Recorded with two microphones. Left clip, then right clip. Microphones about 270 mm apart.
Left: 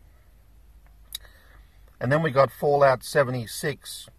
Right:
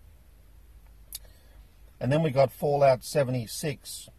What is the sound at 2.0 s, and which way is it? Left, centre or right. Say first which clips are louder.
Speech: left 3 dB; centre.